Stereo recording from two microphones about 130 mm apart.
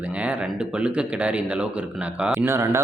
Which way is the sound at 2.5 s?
20° right (ahead or behind).